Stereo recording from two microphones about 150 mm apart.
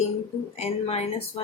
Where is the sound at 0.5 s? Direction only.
45° left (ahead or behind).